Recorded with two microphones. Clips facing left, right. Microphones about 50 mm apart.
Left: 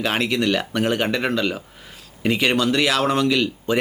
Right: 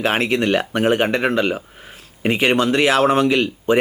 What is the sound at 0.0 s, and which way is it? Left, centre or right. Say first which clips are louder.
A man's voice: right 3 dB; right.